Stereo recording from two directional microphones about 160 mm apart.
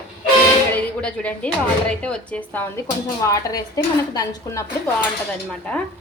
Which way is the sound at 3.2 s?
20° left (ahead or behind).